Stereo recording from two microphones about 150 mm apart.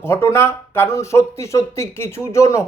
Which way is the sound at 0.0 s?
15° left (ahead or behind).